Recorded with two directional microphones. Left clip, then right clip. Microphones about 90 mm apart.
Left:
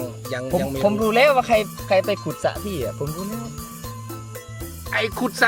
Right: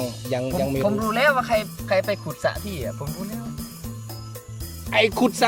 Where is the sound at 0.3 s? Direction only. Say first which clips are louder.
Right 3 dB; 25° right (ahead or behind).